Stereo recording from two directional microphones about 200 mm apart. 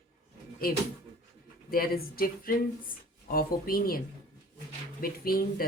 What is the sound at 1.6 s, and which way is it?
Speech, 45° left (ahead or behind).